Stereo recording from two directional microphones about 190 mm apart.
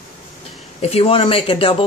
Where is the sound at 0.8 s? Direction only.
30° left (ahead or behind).